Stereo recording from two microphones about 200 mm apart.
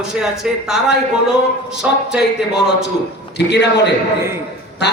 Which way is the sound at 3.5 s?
60° left (ahead or behind).